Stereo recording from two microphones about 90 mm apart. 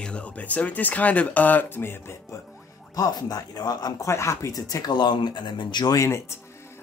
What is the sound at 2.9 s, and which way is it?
Speech, 45° left (ahead or behind).